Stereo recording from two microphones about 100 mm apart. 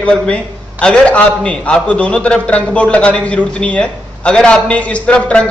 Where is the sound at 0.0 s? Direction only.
10° left (ahead or behind).